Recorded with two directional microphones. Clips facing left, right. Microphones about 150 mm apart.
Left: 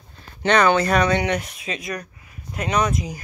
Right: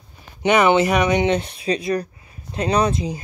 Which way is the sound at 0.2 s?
10° right (ahead or behind).